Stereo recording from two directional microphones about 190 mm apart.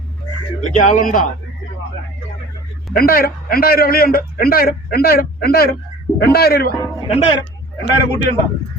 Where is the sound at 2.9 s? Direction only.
50° left (ahead or behind).